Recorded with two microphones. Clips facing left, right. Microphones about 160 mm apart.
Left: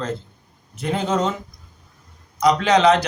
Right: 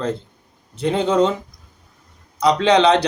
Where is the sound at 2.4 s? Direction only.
30° right (ahead or behind).